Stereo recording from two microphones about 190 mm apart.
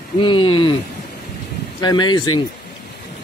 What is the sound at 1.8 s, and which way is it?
Speech, 20° left (ahead or behind).